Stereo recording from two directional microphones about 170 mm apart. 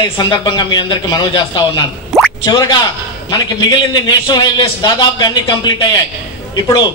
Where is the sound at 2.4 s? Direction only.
25° left (ahead or behind).